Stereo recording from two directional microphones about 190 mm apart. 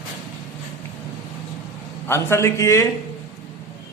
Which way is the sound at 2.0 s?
15° left (ahead or behind).